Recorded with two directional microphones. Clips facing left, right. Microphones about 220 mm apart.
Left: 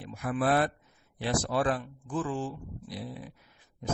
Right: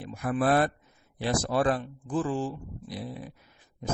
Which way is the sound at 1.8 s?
30° right (ahead or behind).